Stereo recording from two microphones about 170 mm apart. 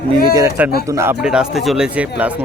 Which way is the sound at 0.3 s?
15° right (ahead or behind).